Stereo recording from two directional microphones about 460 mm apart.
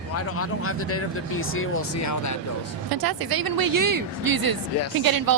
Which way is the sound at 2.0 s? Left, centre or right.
Left.